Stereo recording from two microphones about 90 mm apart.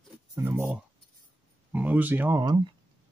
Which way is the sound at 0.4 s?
25° right (ahead or behind).